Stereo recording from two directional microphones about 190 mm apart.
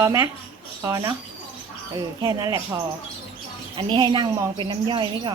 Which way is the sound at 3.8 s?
25° right (ahead or behind).